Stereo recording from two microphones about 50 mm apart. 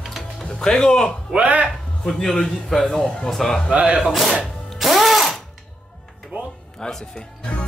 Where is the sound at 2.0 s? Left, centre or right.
Centre.